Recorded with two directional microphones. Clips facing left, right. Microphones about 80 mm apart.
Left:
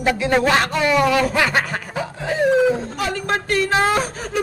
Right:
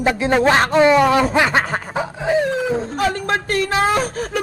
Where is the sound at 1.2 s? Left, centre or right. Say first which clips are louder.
Right 2 dB; right.